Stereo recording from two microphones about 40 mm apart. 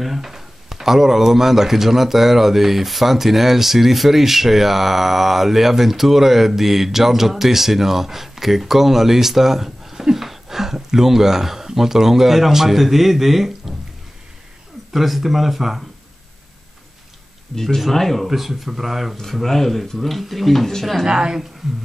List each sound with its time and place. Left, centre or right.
0.0 s speech: centre
14.9 s speech: centre
17.6 s speech: centre
19.1 s speech: centre
21.0 s speech: centre